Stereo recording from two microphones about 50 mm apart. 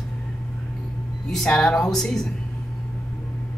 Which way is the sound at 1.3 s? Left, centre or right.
Centre.